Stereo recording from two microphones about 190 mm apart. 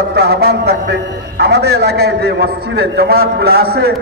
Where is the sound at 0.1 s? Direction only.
55° right (ahead or behind).